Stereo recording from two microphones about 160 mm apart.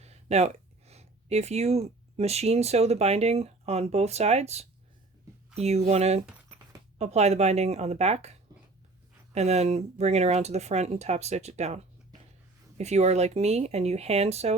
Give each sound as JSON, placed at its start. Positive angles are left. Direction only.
{"t": 0.0, "sound": "speech", "side_deg": -40}